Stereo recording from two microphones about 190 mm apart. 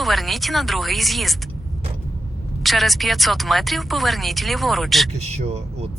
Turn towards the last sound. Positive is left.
turn(degrees=-35)  # may be behind; listen again after turning